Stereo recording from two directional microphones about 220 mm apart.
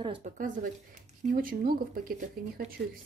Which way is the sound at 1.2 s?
40° right (ahead or behind).